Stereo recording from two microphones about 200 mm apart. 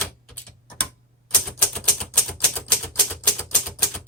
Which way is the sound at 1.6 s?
5° left (ahead or behind).